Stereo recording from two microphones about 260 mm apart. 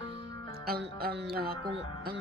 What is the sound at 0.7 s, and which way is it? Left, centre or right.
Music, right.